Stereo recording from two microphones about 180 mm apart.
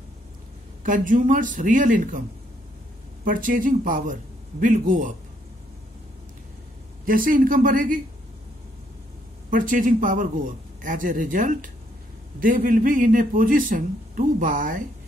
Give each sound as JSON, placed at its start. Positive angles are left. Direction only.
{"t": 0.8, "sound": "a man's voice", "side_deg": -45}
{"t": 3.3, "sound": "a man's voice", "side_deg": -50}
{"t": 7.1, "sound": "a man's voice", "side_deg": -50}
{"t": 9.5, "sound": "a man's voice", "side_deg": -50}